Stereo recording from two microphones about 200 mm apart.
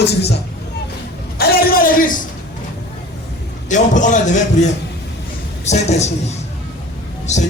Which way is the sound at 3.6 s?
40° left (ahead or behind).